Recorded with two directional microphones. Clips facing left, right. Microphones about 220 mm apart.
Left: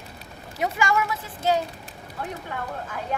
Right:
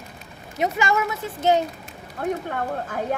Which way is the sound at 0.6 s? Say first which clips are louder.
Right 2 dB; 20° right (ahead or behind).